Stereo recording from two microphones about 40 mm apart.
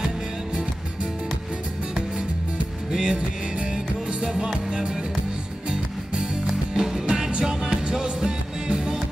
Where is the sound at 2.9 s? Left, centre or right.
Right.